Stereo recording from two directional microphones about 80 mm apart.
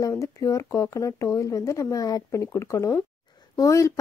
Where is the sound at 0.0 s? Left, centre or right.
Left.